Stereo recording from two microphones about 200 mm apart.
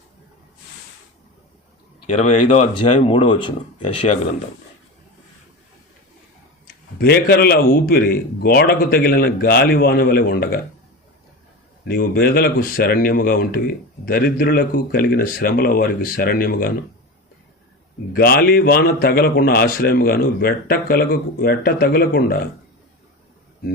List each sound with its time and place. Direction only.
2.1 s speech: 35° left (ahead or behind)
2.7 s speech: 25° left (ahead or behind)
6.7 s a man's voice: 50° left (ahead or behind)
11.9 s a man's voice: 50° left (ahead or behind)
18.1 s a man's voice: 50° left (ahead or behind)